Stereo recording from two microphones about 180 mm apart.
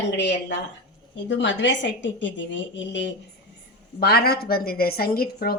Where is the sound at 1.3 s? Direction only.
90° left.